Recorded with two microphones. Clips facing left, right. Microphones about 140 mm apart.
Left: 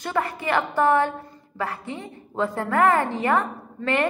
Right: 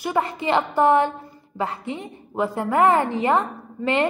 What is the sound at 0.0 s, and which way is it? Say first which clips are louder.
A woman's voice: right 3 dB; 15° right (ahead or behind).